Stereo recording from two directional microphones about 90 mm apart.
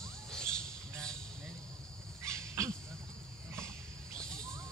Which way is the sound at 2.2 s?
35° right (ahead or behind).